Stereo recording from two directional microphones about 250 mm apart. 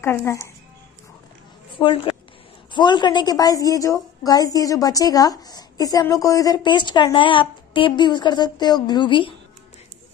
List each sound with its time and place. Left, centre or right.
0.0 s a woman's voice: centre
1.8 s a woman's voice: left